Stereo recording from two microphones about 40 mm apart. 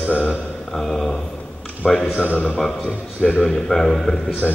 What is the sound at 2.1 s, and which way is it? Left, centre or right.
Speech, left.